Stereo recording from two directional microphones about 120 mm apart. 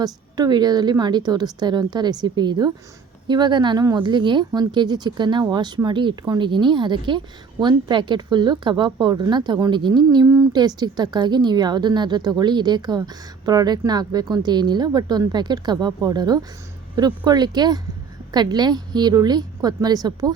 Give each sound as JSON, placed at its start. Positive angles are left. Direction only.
{"t": 0.0, "sound": "a woman's voice", "side_deg": -35}